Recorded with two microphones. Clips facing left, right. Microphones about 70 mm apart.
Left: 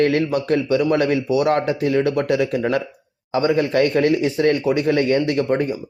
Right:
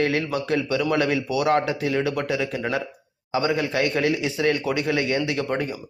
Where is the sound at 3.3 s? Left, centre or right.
Left.